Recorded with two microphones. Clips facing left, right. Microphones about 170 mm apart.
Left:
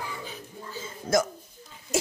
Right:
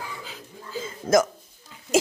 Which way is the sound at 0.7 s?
90° right.